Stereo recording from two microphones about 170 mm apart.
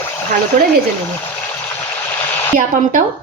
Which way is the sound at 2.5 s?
55° right (ahead or behind).